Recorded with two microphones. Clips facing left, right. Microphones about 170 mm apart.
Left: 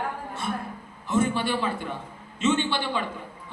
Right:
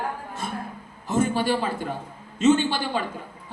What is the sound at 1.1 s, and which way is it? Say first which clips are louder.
A man's voice: right 2 dB; 40° right (ahead or behind).